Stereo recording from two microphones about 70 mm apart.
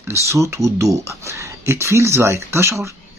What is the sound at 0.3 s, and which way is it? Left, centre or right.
Speech, right.